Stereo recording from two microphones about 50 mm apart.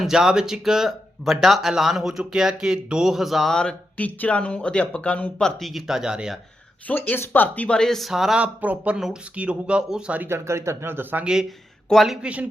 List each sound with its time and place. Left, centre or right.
0.0 s speech: centre
3.5 s speech: centre
3.9 s speech: left
5.4 s speech: centre
5.6 s speech: centre
6.0 s speech: centre
6.8 s speech: left
7.8 s speech: centre
8.1 s speech: centre
8.4 s speech: right
10.2 s speech: right
11.9 s speech: centre
12.2 s speech: right